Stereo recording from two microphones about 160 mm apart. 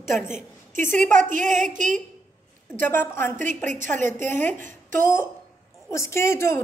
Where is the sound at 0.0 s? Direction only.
15° left (ahead or behind).